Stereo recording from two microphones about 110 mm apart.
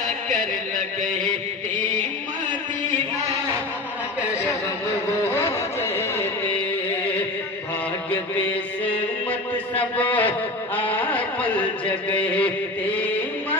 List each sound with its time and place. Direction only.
5.3 s music: 20° left (ahead or behind)
9.8 s a man's voice: 15° left (ahead or behind)
10.9 s music: 15° left (ahead or behind)